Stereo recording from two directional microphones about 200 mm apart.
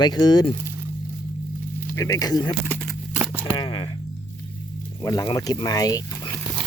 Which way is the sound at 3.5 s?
25° left (ahead or behind).